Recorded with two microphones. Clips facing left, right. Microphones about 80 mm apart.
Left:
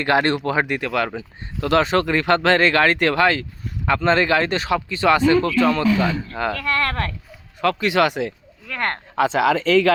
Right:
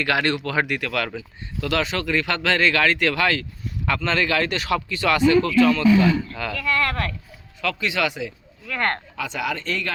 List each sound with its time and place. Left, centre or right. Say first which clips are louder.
0.0 s speech: left 4 dB; left
1.6 s speech: left 6 dB; left
9.1 s speech: left 10 dB; left